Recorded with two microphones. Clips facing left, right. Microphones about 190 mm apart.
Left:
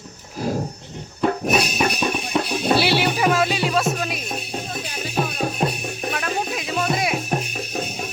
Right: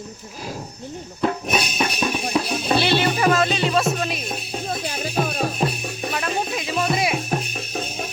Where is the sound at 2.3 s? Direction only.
10° left (ahead or behind).